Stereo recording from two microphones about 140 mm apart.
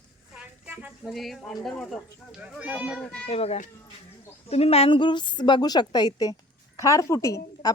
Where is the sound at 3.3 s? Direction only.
45° left (ahead or behind).